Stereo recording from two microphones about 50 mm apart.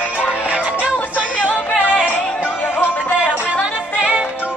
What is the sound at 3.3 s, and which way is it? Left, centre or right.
Music, right.